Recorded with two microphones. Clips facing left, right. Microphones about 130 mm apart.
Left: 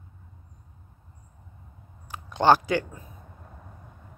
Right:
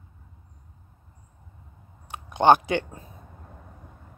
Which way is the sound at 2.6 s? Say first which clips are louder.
Even; 30° right (ahead or behind).